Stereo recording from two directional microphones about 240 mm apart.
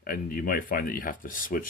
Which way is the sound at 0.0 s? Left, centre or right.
Left.